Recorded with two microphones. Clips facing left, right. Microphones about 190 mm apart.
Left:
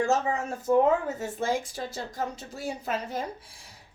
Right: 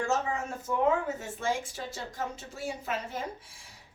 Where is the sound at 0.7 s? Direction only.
40° left (ahead or behind).